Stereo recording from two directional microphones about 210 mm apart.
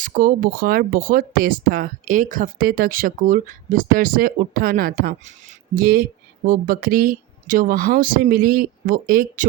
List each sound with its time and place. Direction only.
0.0 s speech: 40° right (ahead or behind)